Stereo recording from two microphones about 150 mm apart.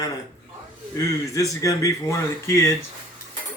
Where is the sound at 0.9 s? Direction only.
25° left (ahead or behind).